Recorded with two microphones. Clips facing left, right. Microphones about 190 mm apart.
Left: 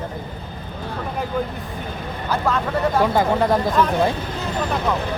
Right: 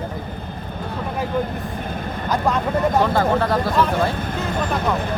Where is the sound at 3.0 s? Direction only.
15° left (ahead or behind).